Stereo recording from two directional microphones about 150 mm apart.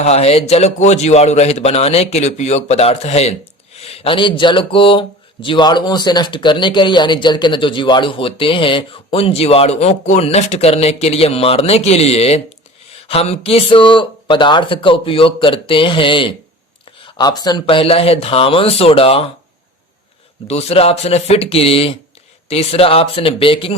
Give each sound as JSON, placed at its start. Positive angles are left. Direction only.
{"t": 0.0, "sound": "a man's voice", "side_deg": 45}
{"t": 20.5, "sound": "a man's voice", "side_deg": 45}